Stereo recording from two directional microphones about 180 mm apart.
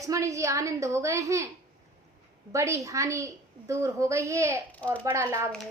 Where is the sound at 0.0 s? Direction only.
15° right (ahead or behind).